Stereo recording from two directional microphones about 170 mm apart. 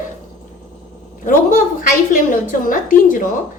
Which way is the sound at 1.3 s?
50° left (ahead or behind).